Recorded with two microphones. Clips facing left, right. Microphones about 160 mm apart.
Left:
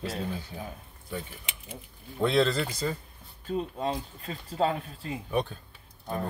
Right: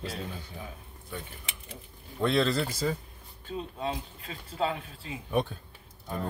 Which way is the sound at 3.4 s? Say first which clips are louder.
Left 4 dB; 40° left (ahead or behind).